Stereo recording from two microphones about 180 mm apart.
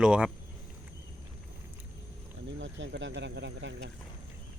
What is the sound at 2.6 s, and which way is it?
Speech, 90° right.